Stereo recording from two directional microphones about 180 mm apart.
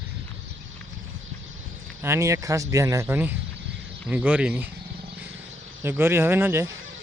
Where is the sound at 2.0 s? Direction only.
15° right (ahead or behind).